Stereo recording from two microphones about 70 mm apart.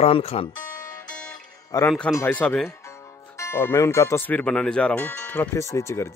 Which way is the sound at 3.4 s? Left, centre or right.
Left.